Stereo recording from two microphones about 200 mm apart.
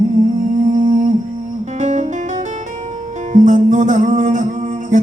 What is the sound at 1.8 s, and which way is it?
Music, 35° right (ahead or behind).